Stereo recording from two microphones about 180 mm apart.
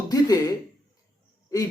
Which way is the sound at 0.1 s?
20° left (ahead or behind).